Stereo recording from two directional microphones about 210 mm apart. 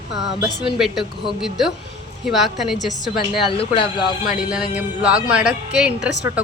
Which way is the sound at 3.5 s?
25° left (ahead or behind).